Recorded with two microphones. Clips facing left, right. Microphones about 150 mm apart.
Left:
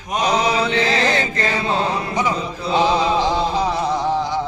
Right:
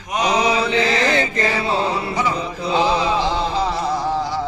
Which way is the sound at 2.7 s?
15° left (ahead or behind).